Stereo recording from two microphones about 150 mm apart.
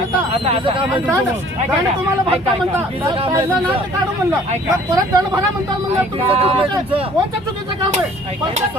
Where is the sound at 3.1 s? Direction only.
35° right (ahead or behind).